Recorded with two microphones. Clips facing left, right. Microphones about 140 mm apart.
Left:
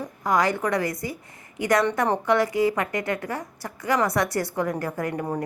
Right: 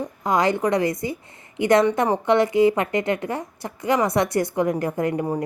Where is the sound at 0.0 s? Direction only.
20° right (ahead or behind).